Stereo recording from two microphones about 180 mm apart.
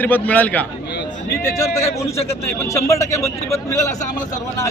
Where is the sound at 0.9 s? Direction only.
65° left (ahead or behind).